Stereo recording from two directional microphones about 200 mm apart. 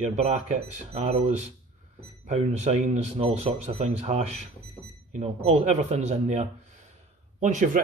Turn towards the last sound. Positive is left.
turn(degrees=-35)  # may be behind; listen again after turning